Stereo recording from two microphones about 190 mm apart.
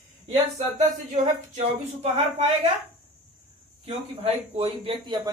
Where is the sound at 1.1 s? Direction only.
35° right (ahead or behind).